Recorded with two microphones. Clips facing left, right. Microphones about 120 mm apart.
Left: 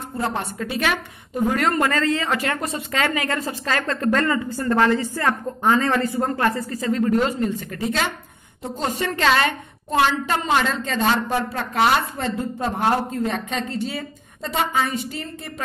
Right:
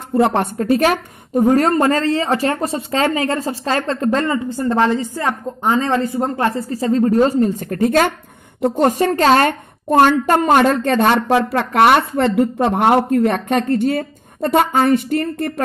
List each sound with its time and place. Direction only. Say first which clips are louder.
0.1 s a woman's voice: right 11 dB; 60° right (ahead or behind)
0.6 s speech: right 10 dB; 45° right (ahead or behind)
8.5 s a woman's voice: right 11 dB; 65° right (ahead or behind)